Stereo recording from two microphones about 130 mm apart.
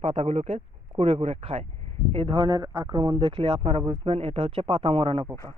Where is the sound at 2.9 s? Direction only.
35° right (ahead or behind).